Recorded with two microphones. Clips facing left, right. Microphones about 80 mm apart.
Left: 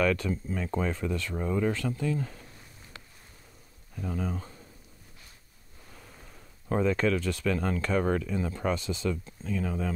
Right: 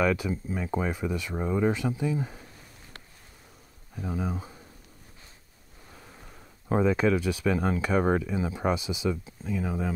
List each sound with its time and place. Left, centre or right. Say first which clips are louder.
0.0 s speech: right 1 dB; centre
3.9 s speech: right 1 dB; centre
5.9 s speech: right 2 dB; centre